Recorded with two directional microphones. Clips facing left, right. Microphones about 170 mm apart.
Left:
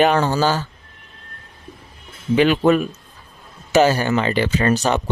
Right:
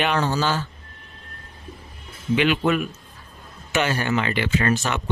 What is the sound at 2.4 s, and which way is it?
A man's voice, 35° left (ahead or behind).